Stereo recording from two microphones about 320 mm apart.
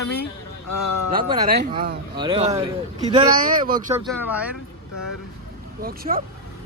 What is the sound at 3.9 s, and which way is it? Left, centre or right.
Speech, centre.